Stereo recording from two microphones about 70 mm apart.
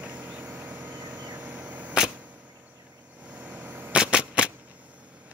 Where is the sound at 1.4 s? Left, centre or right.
Centre.